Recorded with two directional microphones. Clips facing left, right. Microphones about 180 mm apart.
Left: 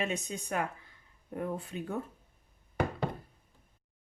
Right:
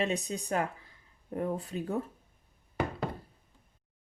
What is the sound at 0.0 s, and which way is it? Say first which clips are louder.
Speech: right 3 dB; 35° right (ahead or behind).